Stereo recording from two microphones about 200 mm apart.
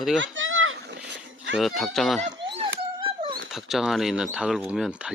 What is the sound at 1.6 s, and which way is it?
Speech, centre (ahead or behind).